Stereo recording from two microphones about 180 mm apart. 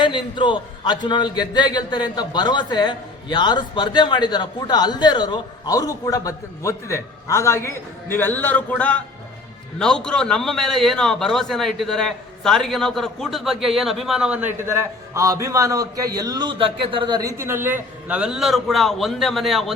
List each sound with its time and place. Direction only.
0.0 s a man's voice: 25° left (ahead or behind); by 19.7 s centre (ahead or behind)